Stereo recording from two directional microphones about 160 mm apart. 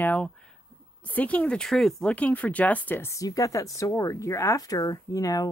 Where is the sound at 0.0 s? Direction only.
10° left (ahead or behind).